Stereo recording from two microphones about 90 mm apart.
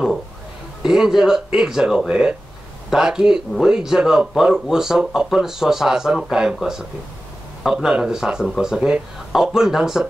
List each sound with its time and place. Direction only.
0.8 s speech: 5° right (ahead or behind)